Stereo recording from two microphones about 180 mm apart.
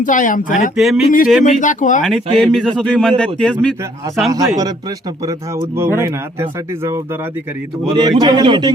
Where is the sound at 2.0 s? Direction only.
Centre (ahead or behind).